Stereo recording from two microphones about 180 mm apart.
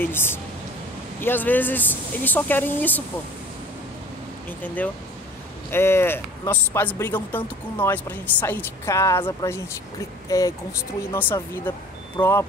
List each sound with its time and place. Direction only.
0.0 s speech: 10° left (ahead or behind)
4.5 s speech: 10° left (ahead or behind)